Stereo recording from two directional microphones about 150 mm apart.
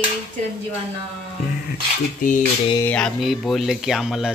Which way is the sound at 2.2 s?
65° left (ahead or behind).